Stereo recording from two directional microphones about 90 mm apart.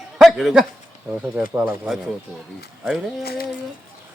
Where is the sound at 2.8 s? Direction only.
5° right (ahead or behind).